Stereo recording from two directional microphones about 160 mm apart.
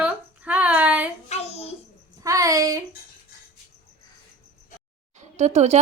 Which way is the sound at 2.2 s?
20° right (ahead or behind).